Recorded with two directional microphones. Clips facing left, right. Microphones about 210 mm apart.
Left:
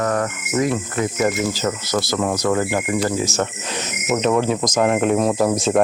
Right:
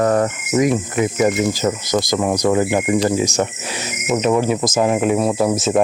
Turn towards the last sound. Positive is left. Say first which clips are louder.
# right 1 dB
turn(degrees=-5)  # may be behind; listen again after turning